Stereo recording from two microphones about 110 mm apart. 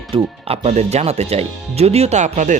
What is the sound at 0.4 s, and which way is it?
Speech, 65° right (ahead or behind).